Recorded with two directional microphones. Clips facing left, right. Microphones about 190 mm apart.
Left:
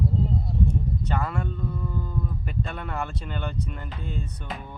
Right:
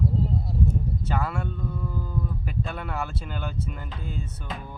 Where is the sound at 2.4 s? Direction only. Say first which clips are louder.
Even; 5° right (ahead or behind).